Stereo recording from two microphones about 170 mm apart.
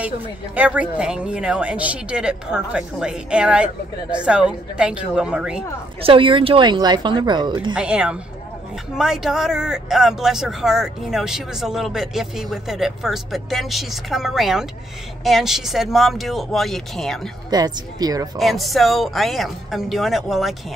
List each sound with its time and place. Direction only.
0.6 s speech: 10° right (ahead or behind)
6.0 s speech: 30° right (ahead or behind)
7.7 s speech: 5° right (ahead or behind)
17.5 s speech: 25° right (ahead or behind)
18.4 s speech: centre (ahead or behind)